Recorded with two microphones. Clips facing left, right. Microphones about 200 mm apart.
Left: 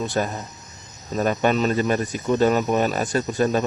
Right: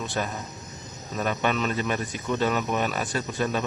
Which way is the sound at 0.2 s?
40° left (ahead or behind).